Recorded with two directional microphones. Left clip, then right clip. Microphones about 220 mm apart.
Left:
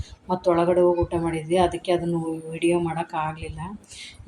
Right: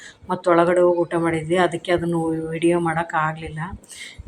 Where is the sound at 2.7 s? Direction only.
5° right (ahead or behind).